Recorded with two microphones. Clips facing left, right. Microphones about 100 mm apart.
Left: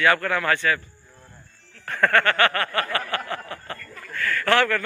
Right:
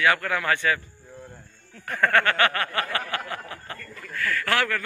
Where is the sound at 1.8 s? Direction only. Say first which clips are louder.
Left 1 dB; 15° right (ahead or behind).